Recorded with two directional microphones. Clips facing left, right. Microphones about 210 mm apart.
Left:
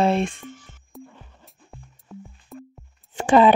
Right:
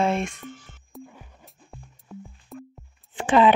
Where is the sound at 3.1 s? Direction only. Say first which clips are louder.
Left 3 dB; 40° left (ahead or behind).